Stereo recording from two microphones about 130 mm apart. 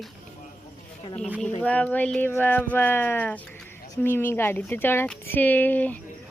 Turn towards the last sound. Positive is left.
turn(degrees=15)  # may be behind; listen again after turning